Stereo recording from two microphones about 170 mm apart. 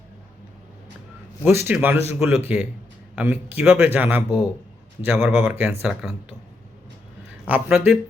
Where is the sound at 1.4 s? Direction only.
15° right (ahead or behind).